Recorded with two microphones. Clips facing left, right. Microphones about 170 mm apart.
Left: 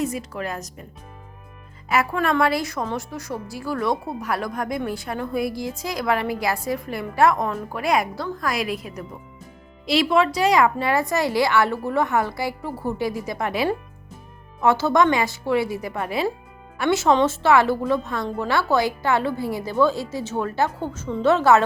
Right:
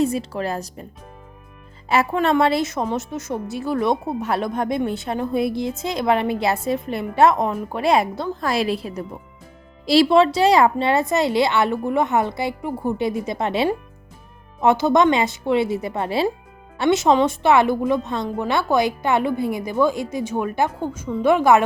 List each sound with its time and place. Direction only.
0.0 s a woman's voice: 30° right (ahead or behind)
1.9 s a woman's voice: 25° right (ahead or behind)